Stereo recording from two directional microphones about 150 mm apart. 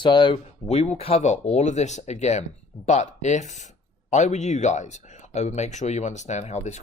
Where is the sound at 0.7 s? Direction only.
45° left (ahead or behind).